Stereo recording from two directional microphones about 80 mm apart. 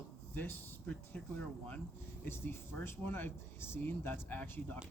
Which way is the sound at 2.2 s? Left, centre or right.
Left.